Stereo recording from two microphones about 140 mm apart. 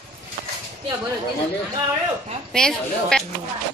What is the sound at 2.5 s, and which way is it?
Speech, 5° left (ahead or behind).